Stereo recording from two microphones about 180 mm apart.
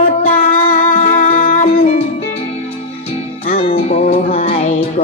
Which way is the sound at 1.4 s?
50° left (ahead or behind).